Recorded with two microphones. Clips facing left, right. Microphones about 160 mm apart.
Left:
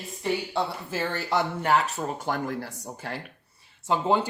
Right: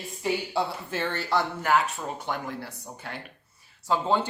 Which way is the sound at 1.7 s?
40° left (ahead or behind).